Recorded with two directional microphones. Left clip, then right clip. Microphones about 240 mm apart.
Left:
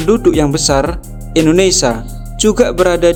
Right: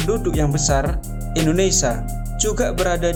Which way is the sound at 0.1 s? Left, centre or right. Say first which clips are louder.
Left 11 dB; left.